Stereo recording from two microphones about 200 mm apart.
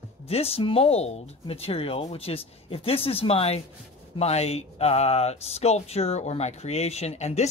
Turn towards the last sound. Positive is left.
turn(degrees=35)  # may be behind; listen again after turning